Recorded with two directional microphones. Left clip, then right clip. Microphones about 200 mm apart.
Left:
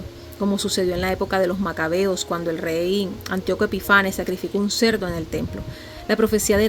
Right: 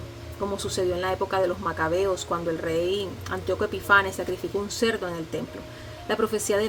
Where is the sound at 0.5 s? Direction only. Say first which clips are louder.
Left 4 dB; 35° left (ahead or behind).